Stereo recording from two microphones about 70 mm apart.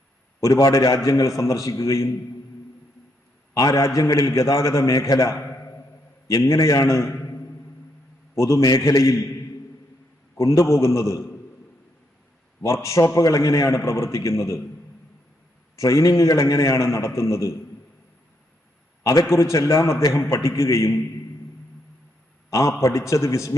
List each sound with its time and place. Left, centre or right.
0.3 s a man's voice: left
3.5 s a man's voice: left
7.3 s music: left
8.4 s a man's voice: left
10.3 s a man's voice: left
12.6 s a man's voice: left
15.8 s a man's voice: left
19.3 s a man's voice: left
22.4 s a man's voice: left